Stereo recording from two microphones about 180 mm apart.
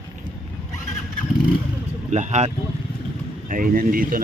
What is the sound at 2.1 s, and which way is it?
Speech, 40° right (ahead or behind).